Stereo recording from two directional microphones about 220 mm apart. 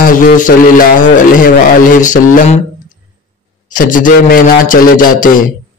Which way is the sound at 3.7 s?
40° left (ahead or behind).